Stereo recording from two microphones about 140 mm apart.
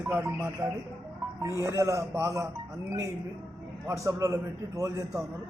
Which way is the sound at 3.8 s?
20° right (ahead or behind).